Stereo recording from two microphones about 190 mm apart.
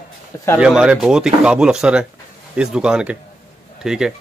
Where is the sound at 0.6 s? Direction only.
5° right (ahead or behind).